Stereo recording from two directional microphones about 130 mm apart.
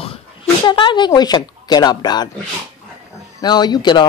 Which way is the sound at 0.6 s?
40° left (ahead or behind).